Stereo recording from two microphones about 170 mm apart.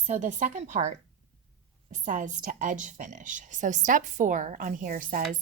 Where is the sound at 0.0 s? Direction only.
45° right (ahead or behind).